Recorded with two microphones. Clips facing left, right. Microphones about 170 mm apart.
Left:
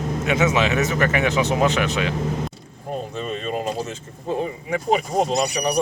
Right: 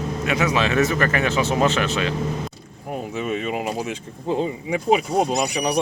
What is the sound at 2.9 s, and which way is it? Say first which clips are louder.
Speech: right 2 dB; 10° right (ahead or behind).